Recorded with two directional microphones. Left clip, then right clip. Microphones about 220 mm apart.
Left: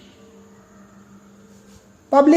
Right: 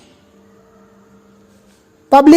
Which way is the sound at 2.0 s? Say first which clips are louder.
Right 6 dB; 50° right (ahead or behind).